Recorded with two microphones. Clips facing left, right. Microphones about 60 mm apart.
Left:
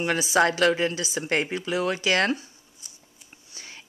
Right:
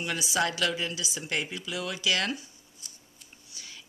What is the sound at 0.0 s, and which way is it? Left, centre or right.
A woman's voice, left.